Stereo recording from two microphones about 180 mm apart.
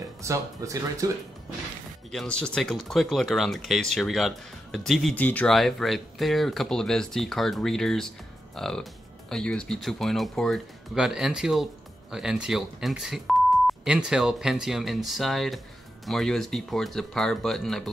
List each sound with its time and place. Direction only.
0.2 s speech: 15° right (ahead or behind)
2.0 s speech: 5° left (ahead or behind)